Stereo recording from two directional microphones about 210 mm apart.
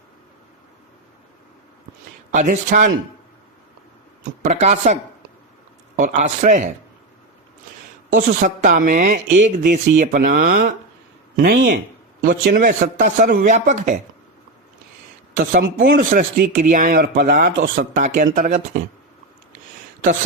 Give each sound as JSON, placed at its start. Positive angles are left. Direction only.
{"t": 2.3, "sound": "speech", "side_deg": -35}
{"t": 4.4, "sound": "speech", "side_deg": -35}
{"t": 6.0, "sound": "speech", "side_deg": -35}
{"t": 8.1, "sound": "speech", "side_deg": -40}
{"t": 15.5, "sound": "speech", "side_deg": -45}
{"t": 19.5, "sound": "a sound", "side_deg": -35}